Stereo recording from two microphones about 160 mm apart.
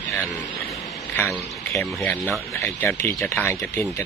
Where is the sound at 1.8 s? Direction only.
5° left (ahead or behind).